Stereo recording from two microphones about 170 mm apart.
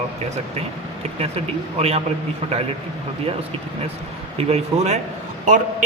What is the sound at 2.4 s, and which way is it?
Speech, 35° right (ahead or behind).